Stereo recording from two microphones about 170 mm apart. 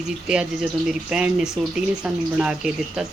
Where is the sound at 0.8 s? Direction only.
5° right (ahead or behind).